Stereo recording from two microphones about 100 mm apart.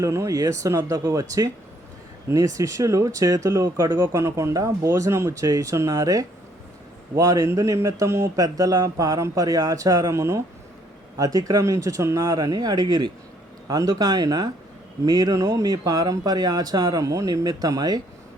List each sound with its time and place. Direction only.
0.0 s speech: 30° right (ahead or behind)